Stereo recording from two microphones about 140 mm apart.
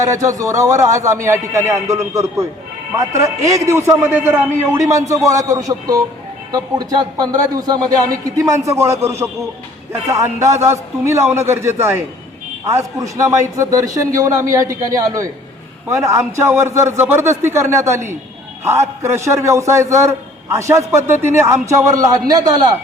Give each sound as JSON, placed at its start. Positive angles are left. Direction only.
{"t": 0.0, "sound": "a man's voice", "side_deg": -25}